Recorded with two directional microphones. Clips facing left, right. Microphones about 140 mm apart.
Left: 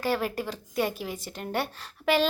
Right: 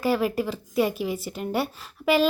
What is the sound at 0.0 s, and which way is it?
A woman's voice, 5° right (ahead or behind).